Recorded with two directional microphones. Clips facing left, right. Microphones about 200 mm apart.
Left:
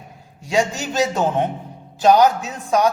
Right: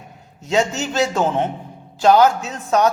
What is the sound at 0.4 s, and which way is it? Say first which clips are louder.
A man's voice: right 1 dB; 15° left (ahead or behind).